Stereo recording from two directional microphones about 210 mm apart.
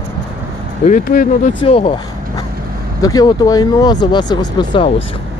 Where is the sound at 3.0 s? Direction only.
20° left (ahead or behind).